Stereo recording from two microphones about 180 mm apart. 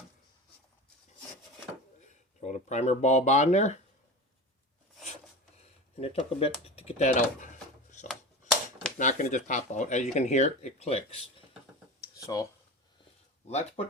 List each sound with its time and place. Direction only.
2.4 s speech: 40° left (ahead or behind)
6.0 s speech: 35° left (ahead or behind)
11.9 s a sound: 20° left (ahead or behind)
13.5 s speech: 35° left (ahead or behind)